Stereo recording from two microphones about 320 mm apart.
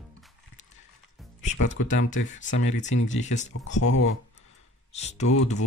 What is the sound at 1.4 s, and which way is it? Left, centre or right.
Music, left.